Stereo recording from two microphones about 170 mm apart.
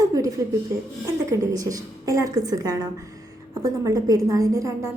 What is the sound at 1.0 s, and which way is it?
A woman's voice, 20° right (ahead or behind).